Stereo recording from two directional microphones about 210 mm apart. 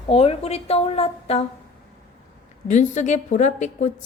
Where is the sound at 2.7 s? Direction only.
35° left (ahead or behind).